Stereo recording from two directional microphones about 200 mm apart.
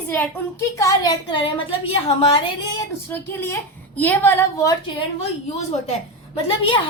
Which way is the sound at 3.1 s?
10° left (ahead or behind).